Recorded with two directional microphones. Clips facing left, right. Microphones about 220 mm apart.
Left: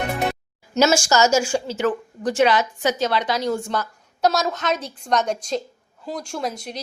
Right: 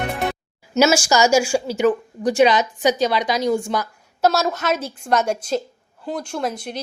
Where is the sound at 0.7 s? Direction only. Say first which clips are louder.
Right 1 dB; 5° right (ahead or behind).